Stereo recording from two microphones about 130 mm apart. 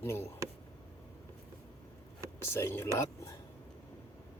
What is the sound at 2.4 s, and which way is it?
Speech, 20° left (ahead or behind).